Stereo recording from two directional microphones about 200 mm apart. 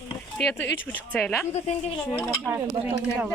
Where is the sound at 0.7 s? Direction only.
10° left (ahead or behind).